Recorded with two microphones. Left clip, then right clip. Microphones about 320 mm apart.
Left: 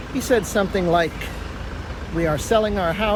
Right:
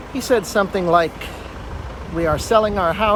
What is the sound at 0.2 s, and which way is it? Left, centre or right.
Speech, centre.